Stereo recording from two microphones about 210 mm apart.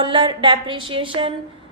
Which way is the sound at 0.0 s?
25° right (ahead or behind).